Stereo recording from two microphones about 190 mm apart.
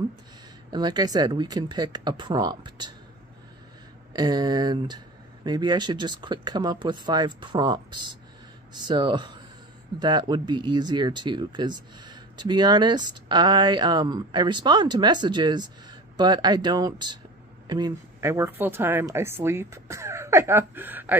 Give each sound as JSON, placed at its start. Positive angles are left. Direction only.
{"t": 0.7, "sound": "speech", "side_deg": -20}
{"t": 4.1, "sound": "speech", "side_deg": -20}